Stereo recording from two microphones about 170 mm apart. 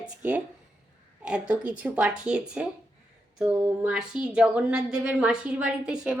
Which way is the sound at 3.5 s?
15° right (ahead or behind).